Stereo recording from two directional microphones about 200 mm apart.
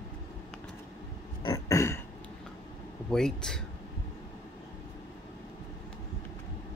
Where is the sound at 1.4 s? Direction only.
20° left (ahead or behind).